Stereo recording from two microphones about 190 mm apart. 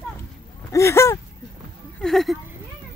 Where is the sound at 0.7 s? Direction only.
15° left (ahead or behind).